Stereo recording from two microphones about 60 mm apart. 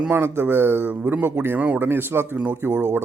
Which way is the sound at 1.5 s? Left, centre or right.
Right.